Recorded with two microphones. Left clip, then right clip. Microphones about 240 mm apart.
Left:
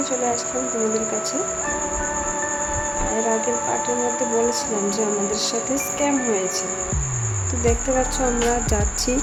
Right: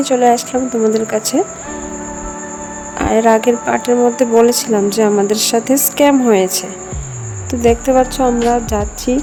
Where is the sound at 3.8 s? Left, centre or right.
Right.